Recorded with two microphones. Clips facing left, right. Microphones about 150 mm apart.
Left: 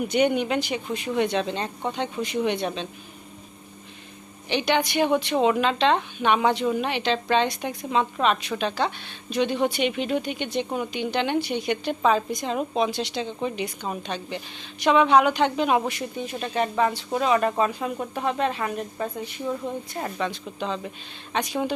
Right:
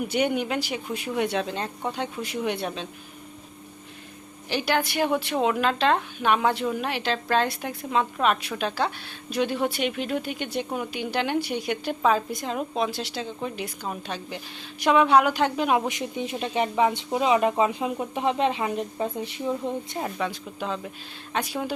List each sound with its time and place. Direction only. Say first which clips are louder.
0.0 s a woman's voice: left 3 dB; 5° right (ahead or behind)
4.4 s a woman's voice: left 2 dB; 5° right (ahead or behind)
15.9 s speech: right 1 dB; 20° right (ahead or behind)
20.0 s a woman's voice: even; 5° right (ahead or behind)